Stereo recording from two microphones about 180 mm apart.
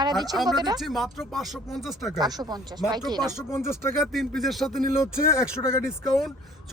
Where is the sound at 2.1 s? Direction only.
20° right (ahead or behind).